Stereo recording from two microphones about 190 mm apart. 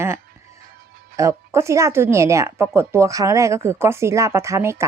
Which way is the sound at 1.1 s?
15° right (ahead or behind).